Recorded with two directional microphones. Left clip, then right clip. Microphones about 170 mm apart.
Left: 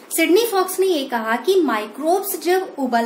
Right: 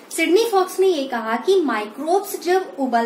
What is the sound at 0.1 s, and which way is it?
A woman's voice, 45° left (ahead or behind).